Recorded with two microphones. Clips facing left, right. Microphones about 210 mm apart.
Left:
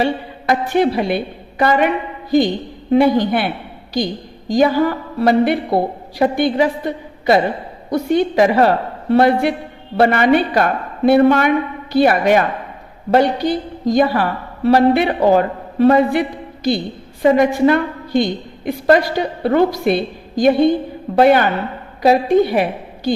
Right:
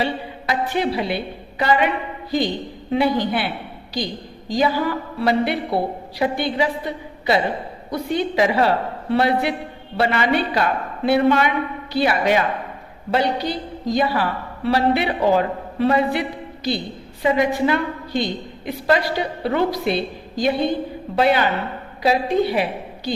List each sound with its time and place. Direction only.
0.0 s a woman's voice: 50° left (ahead or behind)
2.9 s a woman's voice: 45° left (ahead or behind)
17.2 s a woman's voice: 50° left (ahead or behind)